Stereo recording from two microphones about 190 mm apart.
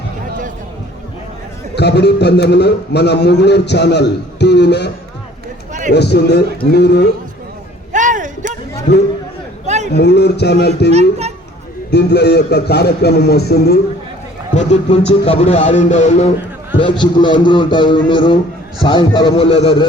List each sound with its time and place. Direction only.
1.7 s a man's voice: 60° left (ahead or behind)
5.9 s a man's voice: 60° left (ahead or behind)
7.9 s a sound: 40° right (ahead or behind)
8.9 s a man's voice: 60° left (ahead or behind)
9.6 s a sound: 35° right (ahead or behind)
9.9 s a man's voice: 60° left (ahead or behind)
14.5 s speech: 35° left (ahead or behind)
16.7 s a man's voice: 25° left (ahead or behind)